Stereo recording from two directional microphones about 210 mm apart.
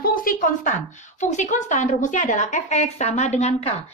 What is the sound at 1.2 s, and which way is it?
A woman's voice, 35° left (ahead or behind).